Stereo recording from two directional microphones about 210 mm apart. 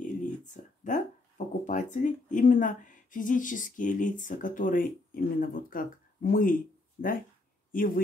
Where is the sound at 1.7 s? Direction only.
35° left (ahead or behind).